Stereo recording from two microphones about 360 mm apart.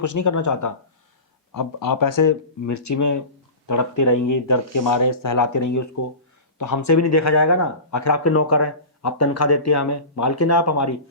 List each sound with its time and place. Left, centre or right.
0.0 s speech: left
1.5 s speech: left